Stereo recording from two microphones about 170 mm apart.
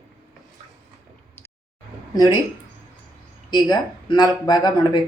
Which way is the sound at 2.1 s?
25° left (ahead or behind).